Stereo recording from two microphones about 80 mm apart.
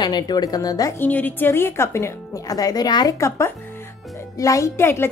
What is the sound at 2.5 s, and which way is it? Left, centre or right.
Speech, left.